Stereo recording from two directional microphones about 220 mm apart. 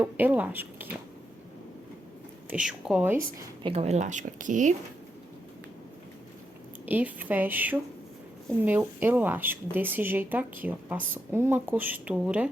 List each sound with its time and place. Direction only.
0.0 s speech: 10° right (ahead or behind)
2.5 s speech: 5° right (ahead or behind)
3.6 s a woman's voice: 25° right (ahead or behind)
6.8 s speech: 10° right (ahead or behind)